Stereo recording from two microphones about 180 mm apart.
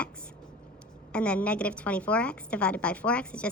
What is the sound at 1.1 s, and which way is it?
A woman's voice, 5° left (ahead or behind).